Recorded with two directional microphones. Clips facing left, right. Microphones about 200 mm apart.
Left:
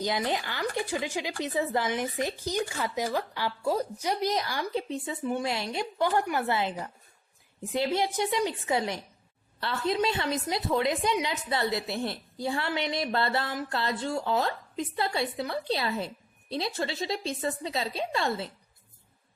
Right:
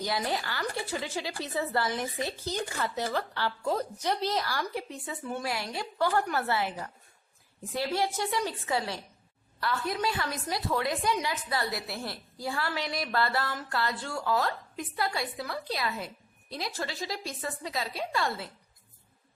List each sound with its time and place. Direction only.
0.0 s a woman's voice: 20° left (ahead or behind)